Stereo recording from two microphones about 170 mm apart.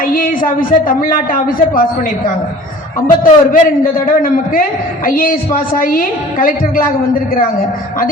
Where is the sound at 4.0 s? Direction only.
55° left (ahead or behind).